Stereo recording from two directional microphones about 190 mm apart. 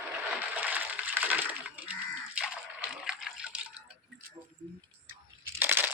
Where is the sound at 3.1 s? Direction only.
5° right (ahead or behind).